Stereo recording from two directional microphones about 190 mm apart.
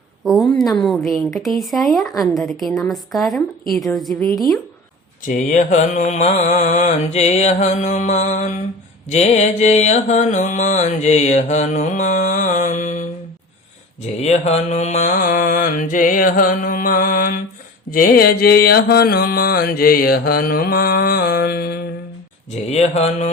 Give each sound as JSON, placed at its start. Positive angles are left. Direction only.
{"t": 0.3, "sound": "a woman's voice", "side_deg": 0}
{"t": 5.2, "sound": "mantra", "side_deg": 40}
{"t": 14.2, "sound": "mantra", "side_deg": 35}
{"t": 22.7, "sound": "mantra", "side_deg": 35}